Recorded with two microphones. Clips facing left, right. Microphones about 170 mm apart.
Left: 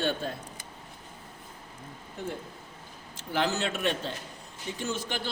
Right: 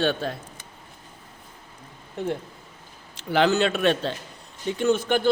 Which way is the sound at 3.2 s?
75° right (ahead or behind).